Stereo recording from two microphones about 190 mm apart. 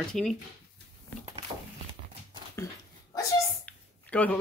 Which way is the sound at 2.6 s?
15° left (ahead or behind).